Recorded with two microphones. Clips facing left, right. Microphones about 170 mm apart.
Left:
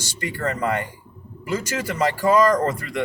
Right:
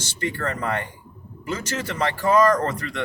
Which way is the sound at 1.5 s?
10° left (ahead or behind).